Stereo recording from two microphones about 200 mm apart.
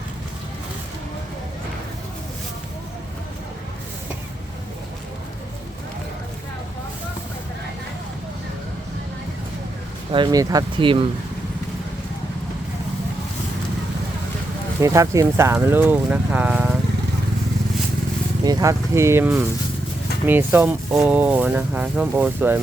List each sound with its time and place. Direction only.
10.1 s speech: 20° right (ahead or behind)
14.8 s speech: 15° right (ahead or behind)
18.4 s speech: 15° right (ahead or behind)